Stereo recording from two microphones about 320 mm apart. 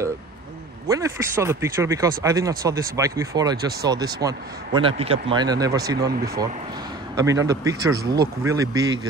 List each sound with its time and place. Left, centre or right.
0.8 s speech: centre
7.2 s speech: centre
8.0 s speech: right
8.5 s speech: centre